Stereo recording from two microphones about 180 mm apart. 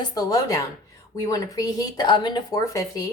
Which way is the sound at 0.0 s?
20° left (ahead or behind).